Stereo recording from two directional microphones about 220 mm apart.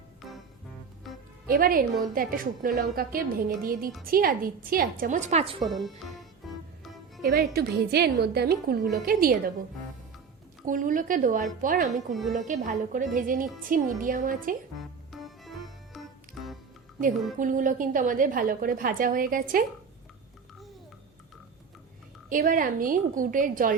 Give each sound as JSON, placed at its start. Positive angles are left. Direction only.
{"t": 1.5, "sound": "a woman's voice", "side_deg": -40}
{"t": 5.7, "sound": "speech", "side_deg": 0}
{"t": 6.4, "sound": "music", "side_deg": 0}
{"t": 7.2, "sound": "a woman's voice", "side_deg": -45}
{"t": 10.7, "sound": "a woman's voice", "side_deg": -35}
{"t": 15.1, "sound": "organ", "side_deg": 0}
{"t": 17.3, "sound": "a woman's voice", "side_deg": -35}
{"t": 22.3, "sound": "a woman's voice", "side_deg": -40}